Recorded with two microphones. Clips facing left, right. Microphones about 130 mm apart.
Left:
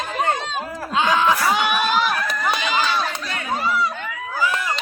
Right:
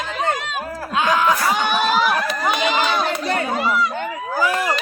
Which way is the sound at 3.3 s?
35° right (ahead or behind).